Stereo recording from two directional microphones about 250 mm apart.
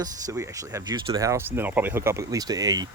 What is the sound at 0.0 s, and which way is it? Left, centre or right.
Speech, centre.